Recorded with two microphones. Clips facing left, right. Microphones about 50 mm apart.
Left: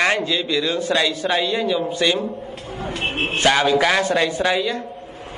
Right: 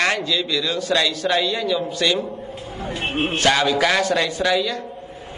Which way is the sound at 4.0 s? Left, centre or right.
Left.